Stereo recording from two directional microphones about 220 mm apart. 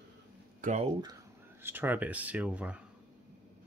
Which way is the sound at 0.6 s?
30° right (ahead or behind).